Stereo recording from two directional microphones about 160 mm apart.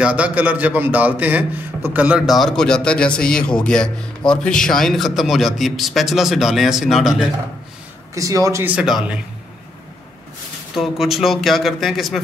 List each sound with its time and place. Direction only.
0.0 s a man's voice: 10° right (ahead or behind)
8.1 s speech: 20° right (ahead or behind)
8.7 s a man's voice: 5° right (ahead or behind)
10.7 s a man's voice: centre (ahead or behind)